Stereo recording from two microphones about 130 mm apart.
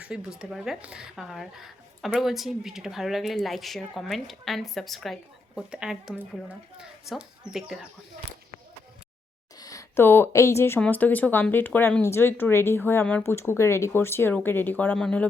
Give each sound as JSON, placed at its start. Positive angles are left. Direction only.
{"t": 0.0, "sound": "speech", "side_deg": -5}
{"t": 9.6, "sound": "speech", "side_deg": 25}